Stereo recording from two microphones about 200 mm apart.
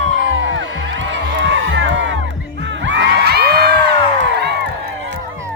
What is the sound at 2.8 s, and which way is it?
Crowd, 60° right (ahead or behind).